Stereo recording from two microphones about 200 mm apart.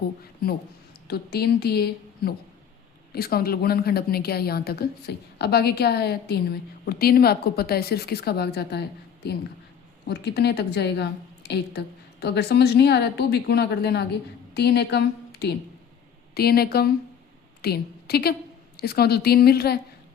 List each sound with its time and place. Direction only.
1.0 s a woman's voice: 50° left (ahead or behind)
10.1 s a woman's voice: 55° left (ahead or behind)